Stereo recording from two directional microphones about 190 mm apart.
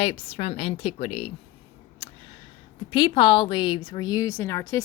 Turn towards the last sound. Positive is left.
turn(degrees=15)  # may be behind; listen again after turning